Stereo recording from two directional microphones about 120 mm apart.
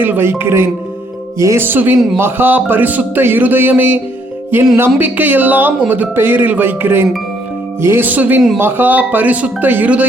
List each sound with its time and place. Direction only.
0.0 s speech: 15° right (ahead or behind)